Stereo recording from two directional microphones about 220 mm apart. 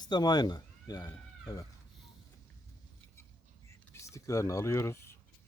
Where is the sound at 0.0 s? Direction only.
20° left (ahead or behind).